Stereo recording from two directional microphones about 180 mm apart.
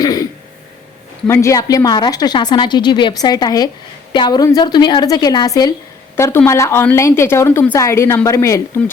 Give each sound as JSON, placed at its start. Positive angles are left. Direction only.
{"t": 0.0, "sound": "throat clearing", "side_deg": 20}
{"t": 1.3, "sound": "a woman's voice", "side_deg": 15}